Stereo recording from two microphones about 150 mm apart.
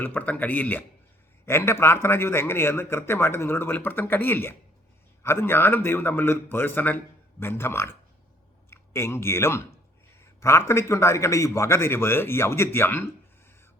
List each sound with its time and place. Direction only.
0.0 s a man's voice: 10° left (ahead or behind)